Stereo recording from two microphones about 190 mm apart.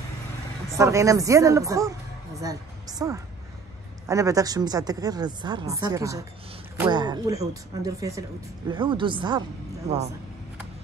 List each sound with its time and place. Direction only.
0.7 s a woman's voice: 15° right (ahead or behind)